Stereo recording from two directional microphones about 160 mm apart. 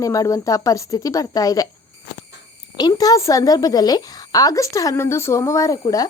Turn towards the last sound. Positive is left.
turn(degrees=20)  # may be behind; listen again after turning